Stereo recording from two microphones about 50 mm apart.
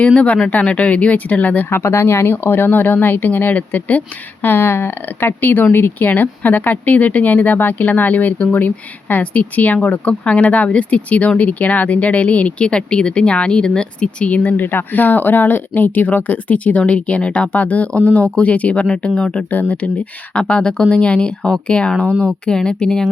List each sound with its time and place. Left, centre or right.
0.0 s speech: left
1.7 s speech: left
4.4 s speech: left
5.0 s speech: left; by 23.0 s centre